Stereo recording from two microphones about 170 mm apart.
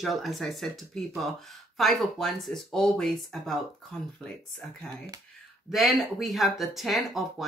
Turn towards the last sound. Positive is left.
turn(degrees=0)  # may be behind; listen again after turning